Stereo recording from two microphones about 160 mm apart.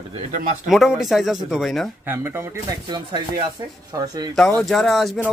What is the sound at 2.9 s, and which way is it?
Speech, 25° right (ahead or behind).